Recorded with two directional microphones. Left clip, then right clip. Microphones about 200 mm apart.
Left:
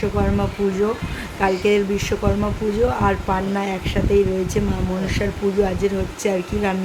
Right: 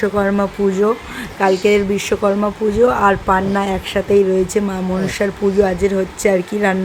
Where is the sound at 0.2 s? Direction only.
25° right (ahead or behind).